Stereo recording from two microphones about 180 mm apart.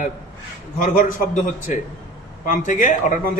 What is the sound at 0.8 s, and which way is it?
A man's voice, 45° left (ahead or behind).